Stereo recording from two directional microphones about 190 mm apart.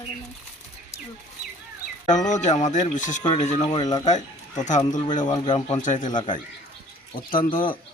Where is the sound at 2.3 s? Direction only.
40° left (ahead or behind).